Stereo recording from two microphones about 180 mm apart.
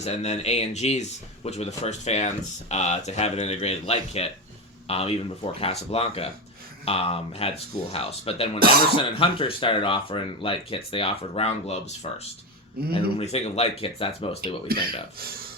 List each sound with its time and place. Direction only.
0.0 s speech: 35° left (ahead or behind)